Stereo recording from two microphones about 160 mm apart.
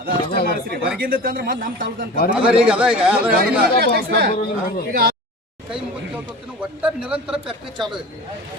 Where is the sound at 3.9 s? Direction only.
75° right (ahead or behind).